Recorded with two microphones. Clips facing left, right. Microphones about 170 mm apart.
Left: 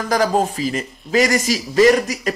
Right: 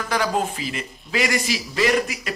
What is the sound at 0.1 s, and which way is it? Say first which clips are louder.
Speech: left 6 dB; 40° left (ahead or behind).